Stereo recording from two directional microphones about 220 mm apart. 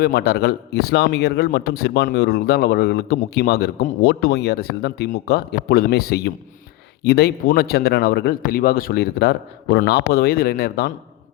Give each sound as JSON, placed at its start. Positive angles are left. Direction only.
{"t": 0.0, "sound": "a man's voice", "side_deg": 45}